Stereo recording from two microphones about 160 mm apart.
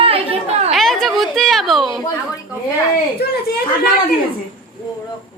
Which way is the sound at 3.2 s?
75° left (ahead or behind).